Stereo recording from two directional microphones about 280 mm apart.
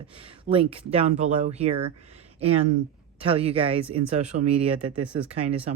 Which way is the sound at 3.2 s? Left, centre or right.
Centre.